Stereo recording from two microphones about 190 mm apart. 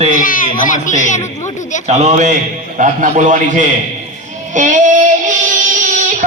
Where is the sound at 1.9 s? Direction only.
35° right (ahead or behind).